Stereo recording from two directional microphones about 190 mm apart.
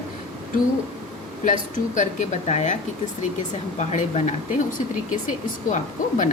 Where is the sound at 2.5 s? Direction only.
35° left (ahead or behind).